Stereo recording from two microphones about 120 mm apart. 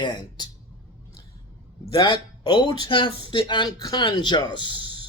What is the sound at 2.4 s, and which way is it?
Speech, 35° left (ahead or behind).